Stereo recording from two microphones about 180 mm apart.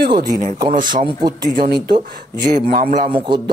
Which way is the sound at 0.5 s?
25° right (ahead or behind).